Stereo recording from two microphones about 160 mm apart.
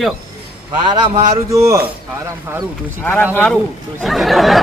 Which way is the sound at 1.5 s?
20° right (ahead or behind).